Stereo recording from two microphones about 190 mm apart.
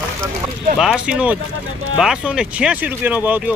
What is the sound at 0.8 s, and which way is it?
Speech, 5° right (ahead or behind).